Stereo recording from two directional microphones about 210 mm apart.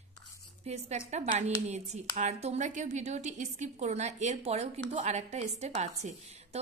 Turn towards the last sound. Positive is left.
turn(degrees=-35)  # may be behind; listen again after turning